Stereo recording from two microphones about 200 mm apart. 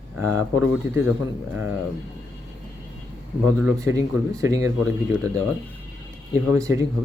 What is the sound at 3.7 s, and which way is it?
Speech, 15° right (ahead or behind).